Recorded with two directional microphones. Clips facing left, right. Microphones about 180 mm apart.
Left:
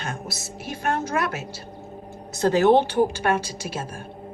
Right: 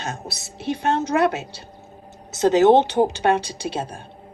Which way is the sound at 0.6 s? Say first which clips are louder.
Right 5 dB; 25° right (ahead or behind).